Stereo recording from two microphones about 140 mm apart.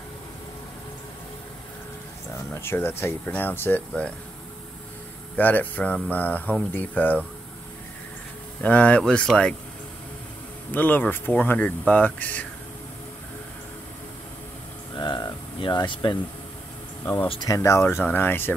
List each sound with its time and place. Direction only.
2.5 s speech: 15° left (ahead or behind)
5.4 s speech: 10° left (ahead or behind)
8.6 s speech: 10° left (ahead or behind)
10.7 s speech: 15° left (ahead or behind)
15.0 s speech: 30° left (ahead or behind)
17.0 s speech: 15° left (ahead or behind)